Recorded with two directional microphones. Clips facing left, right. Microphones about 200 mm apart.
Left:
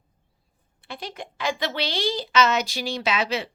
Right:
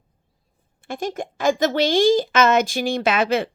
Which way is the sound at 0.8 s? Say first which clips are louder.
Right 9 dB; 45° right (ahead or behind).